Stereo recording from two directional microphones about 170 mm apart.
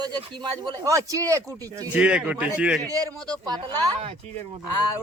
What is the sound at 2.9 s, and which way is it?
Speech, 20° right (ahead or behind).